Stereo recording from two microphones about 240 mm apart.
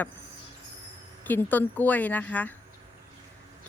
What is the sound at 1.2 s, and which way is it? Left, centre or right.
A woman's voice, centre.